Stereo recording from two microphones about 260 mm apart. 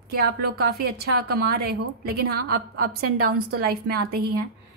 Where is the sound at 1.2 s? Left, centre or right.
Right.